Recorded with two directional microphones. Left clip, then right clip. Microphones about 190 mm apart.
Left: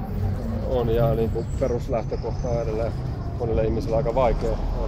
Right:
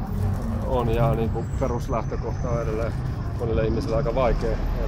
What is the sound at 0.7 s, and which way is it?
Speech, 20° right (ahead or behind).